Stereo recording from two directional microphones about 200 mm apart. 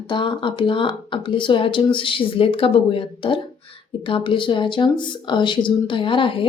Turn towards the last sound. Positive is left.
turn(degrees=25)  # may be behind; listen again after turning